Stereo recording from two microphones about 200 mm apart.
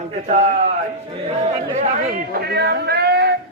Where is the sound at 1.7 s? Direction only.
40° right (ahead or behind); by 3.3 s 55° right (ahead or behind).